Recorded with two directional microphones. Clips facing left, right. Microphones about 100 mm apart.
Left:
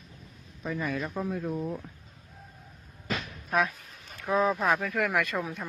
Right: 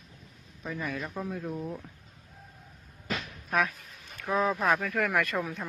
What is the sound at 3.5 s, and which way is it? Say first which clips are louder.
Speech: left 1 dB; 25° left (ahead or behind).